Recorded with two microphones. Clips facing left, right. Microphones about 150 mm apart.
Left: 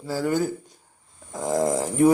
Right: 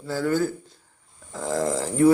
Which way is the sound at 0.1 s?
10° left (ahead or behind).